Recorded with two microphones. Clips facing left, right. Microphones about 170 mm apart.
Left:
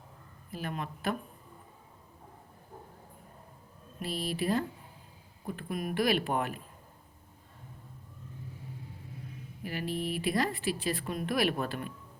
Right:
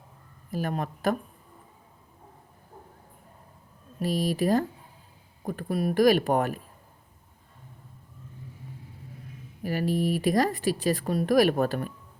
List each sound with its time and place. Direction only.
0.5 s speech: 40° right (ahead or behind)
4.0 s speech: 40° right (ahead or behind)
9.6 s speech: 40° right (ahead or behind)